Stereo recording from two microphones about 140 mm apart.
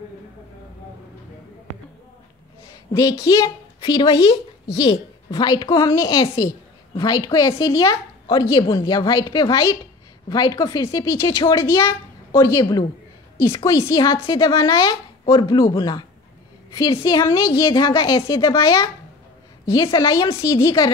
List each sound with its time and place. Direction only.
2.9 s a woman's voice: 25° left (ahead or behind)